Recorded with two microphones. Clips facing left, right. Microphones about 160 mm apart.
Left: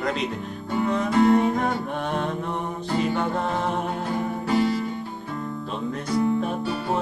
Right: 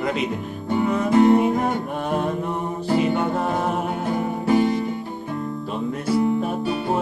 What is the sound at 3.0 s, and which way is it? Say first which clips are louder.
Music: right 1 dB; 5° right (ahead or behind).